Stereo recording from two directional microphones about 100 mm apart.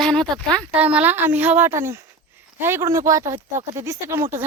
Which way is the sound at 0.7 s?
15° right (ahead or behind).